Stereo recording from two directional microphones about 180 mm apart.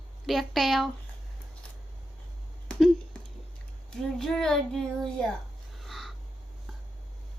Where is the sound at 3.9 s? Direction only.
5° left (ahead or behind).